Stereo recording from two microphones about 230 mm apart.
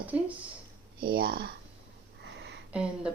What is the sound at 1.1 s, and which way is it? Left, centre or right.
Speech, right.